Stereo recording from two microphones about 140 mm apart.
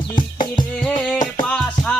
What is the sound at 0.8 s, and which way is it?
Music, 10° left (ahead or behind).